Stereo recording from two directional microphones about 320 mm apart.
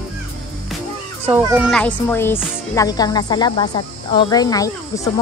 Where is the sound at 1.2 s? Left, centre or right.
Centre.